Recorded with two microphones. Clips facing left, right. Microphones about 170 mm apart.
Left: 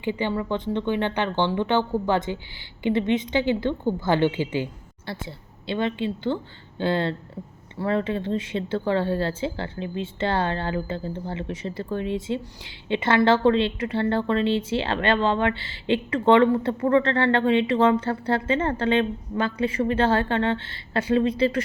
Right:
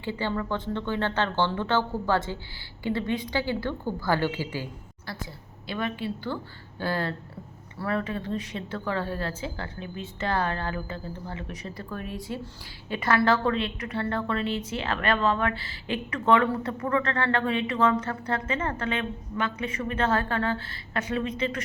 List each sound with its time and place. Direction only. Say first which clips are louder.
0.0 s speech: left 4 dB; 15° left (ahead or behind); by 21.6 s 35° left (ahead or behind)